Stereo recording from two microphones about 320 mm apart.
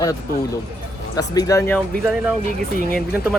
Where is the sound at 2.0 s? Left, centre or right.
Centre.